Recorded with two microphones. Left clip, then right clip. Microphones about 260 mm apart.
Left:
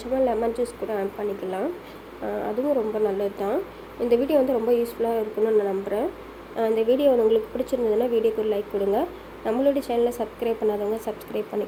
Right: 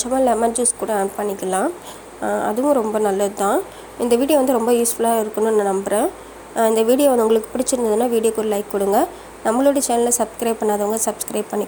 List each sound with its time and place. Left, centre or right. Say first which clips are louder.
0.0 s a woman's voice: right 6 dB; right
2.7 s a woman's voice: right 6 dB; right